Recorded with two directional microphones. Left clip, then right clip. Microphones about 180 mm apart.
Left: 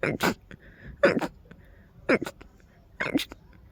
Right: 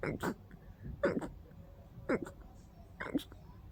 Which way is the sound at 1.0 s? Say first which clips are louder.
Left 12 dB; 45° left (ahead or behind).